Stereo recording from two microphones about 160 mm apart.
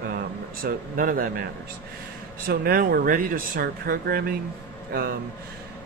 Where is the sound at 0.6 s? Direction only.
60° right (ahead or behind).